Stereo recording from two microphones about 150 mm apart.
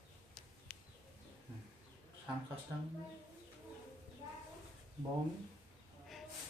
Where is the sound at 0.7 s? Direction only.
5° left (ahead or behind).